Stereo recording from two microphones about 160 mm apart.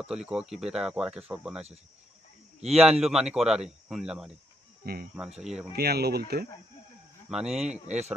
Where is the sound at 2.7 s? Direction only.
40° right (ahead or behind).